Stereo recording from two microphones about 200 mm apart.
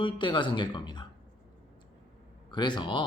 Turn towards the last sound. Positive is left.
turn(degrees=25)  # may be behind; listen again after turning